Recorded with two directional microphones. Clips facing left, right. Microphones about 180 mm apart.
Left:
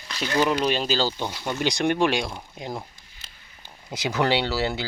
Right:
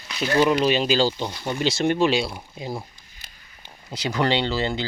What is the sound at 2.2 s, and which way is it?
Speech, 5° right (ahead or behind).